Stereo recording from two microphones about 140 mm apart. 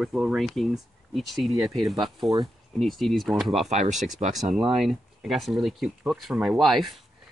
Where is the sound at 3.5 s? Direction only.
50° right (ahead or behind).